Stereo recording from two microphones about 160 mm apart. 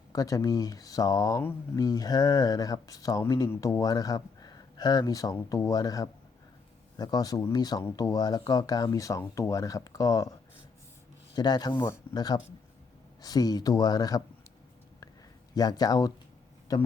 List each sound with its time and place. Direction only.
0.1 s speech: 20° left (ahead or behind)
11.3 s speech: 25° left (ahead or behind)
11.7 s speech: 15° left (ahead or behind)
12.1 s speech: 25° left (ahead or behind)
15.5 s speech: 25° left (ahead or behind)